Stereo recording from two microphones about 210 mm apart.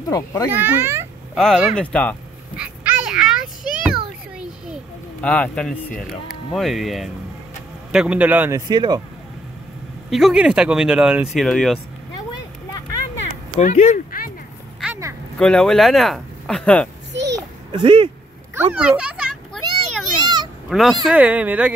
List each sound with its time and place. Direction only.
0.1 s speech: 15° left (ahead or behind)
0.5 s speech: 10° right (ahead or behind)
2.5 s a sound: 5° right (ahead or behind)
5.2 s a man's voice: 5° left (ahead or behind); by 9.0 s 20° right (ahead or behind)
10.0 s speech: centre (ahead or behind)
13.6 s honk: 35° left (ahead or behind)
14.8 s vehicle: 10° right (ahead or behind)
15.3 s speech: 5° left (ahead or behind)
17.1 s a sound: 55° right (ahead or behind)
17.6 s speech: 25° right (ahead or behind)
18.5 s a sound: 10° right (ahead or behind)
20.7 s speech: centre (ahead or behind)